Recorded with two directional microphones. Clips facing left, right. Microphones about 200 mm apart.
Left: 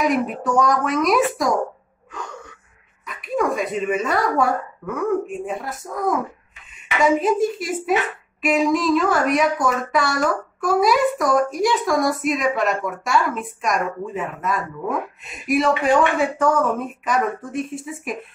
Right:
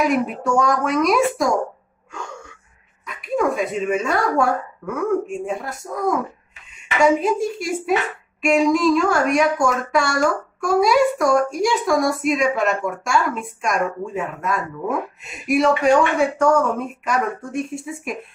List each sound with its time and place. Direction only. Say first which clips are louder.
0.0 s speech: right 1 dB; centre (ahead or behind)
2.1 s gasp: even; centre (ahead or behind)
3.1 s speech: right 1 dB; centre (ahead or behind)